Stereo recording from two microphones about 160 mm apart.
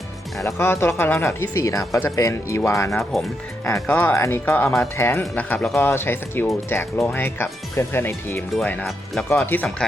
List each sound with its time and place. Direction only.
0.4 s speech: 15° left (ahead or behind)
3.0 s speech: centre (ahead or behind)
3.7 s speech: 15° left (ahead or behind)